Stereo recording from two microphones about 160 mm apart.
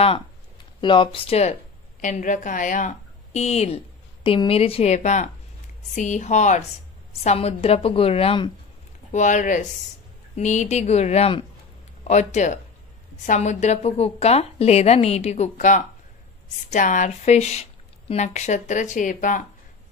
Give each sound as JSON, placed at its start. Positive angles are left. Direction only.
{"t": 0.7, "sound": "a woman's voice", "side_deg": 30}
{"t": 3.3, "sound": "a woman's voice", "side_deg": 45}
{"t": 9.1, "sound": "speech", "side_deg": 50}